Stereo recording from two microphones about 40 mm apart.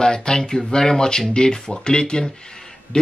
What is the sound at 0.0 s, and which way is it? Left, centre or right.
Speech, centre.